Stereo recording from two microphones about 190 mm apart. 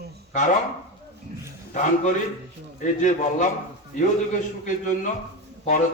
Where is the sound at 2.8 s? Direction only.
40° left (ahead or behind).